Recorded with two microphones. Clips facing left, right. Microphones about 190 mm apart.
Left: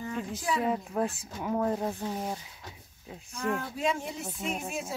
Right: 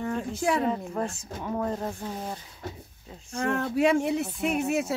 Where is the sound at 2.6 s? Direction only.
55° right (ahead or behind).